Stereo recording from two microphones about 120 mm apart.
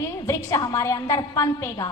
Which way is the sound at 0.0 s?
25° left (ahead or behind).